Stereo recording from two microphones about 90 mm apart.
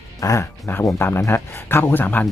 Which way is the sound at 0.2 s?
40° left (ahead or behind).